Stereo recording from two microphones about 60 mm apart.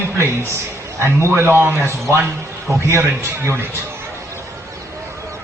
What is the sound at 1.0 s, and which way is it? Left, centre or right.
A man's voice, right.